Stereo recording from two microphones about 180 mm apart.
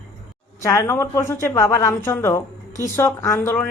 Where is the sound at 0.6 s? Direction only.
15° left (ahead or behind).